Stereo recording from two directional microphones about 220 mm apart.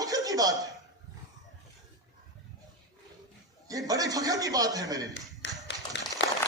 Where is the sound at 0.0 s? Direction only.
15° right (ahead or behind).